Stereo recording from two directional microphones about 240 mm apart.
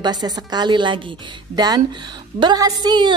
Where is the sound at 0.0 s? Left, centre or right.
Centre.